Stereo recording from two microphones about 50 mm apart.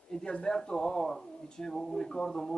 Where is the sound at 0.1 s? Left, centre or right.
Centre.